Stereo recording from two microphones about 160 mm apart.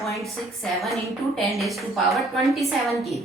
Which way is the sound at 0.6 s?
Centre (ahead or behind).